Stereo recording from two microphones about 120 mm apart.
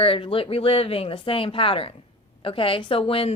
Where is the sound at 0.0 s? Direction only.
50° left (ahead or behind).